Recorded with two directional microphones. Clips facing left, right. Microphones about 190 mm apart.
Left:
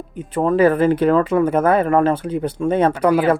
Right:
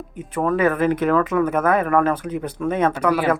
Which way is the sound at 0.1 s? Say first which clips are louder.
Left 3 dB; 30° left (ahead or behind).